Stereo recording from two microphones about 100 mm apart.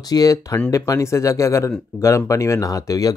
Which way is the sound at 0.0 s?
40° left (ahead or behind).